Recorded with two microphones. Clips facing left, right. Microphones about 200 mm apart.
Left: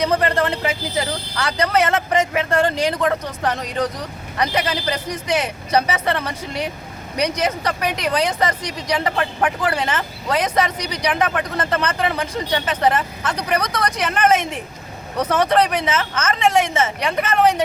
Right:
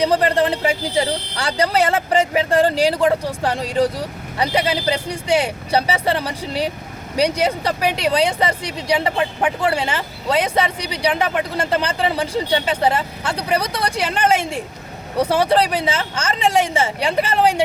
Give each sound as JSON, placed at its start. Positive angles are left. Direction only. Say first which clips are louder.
{"t": 0.0, "sound": "speech", "louder": "right 2 dB", "side_deg": -35}